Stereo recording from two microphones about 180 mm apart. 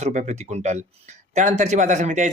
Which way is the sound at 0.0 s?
45° right (ahead or behind).